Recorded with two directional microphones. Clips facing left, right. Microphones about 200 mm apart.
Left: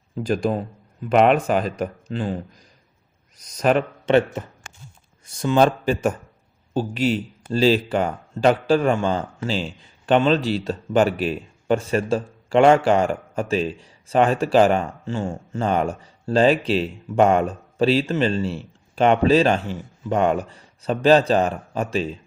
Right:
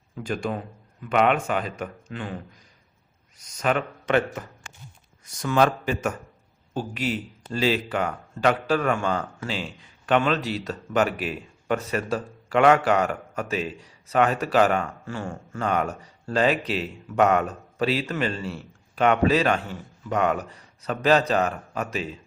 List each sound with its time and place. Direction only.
0.2 s speech: 35° left (ahead or behind)